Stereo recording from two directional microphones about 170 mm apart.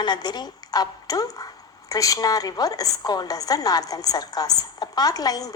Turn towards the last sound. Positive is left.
turn(degrees=20)  # may be behind; listen again after turning